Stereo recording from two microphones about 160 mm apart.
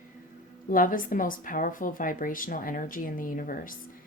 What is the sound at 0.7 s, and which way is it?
A woman's voice, 60° left (ahead or behind).